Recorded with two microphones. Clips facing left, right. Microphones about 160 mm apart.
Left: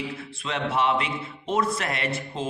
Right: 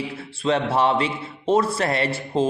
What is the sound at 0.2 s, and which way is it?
A man's voice, 35° right (ahead or behind).